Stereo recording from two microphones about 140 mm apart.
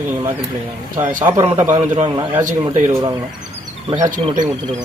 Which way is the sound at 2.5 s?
60° right (ahead or behind).